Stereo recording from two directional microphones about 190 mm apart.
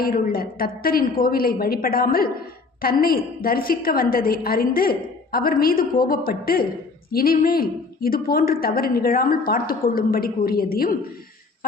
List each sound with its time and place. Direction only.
0.0 s a woman's voice: 50° left (ahead or behind)